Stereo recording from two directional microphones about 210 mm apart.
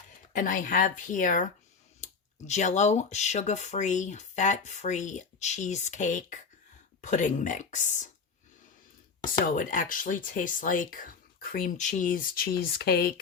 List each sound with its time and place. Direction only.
0.3 s speech: 40° left (ahead or behind)
9.6 s speech: 40° left (ahead or behind)